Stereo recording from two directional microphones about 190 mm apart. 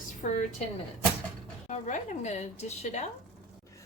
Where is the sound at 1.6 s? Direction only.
40° left (ahead or behind).